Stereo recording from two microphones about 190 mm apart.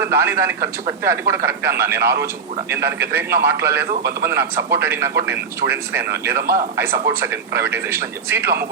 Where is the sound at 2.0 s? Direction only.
60° right (ahead or behind).